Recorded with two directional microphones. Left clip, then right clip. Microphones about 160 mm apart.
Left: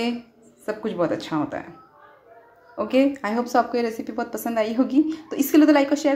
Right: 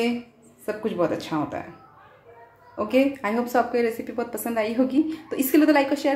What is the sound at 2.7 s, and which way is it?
A woman's voice, 10° left (ahead or behind).